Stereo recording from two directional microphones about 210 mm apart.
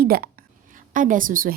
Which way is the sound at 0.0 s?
45° right (ahead or behind).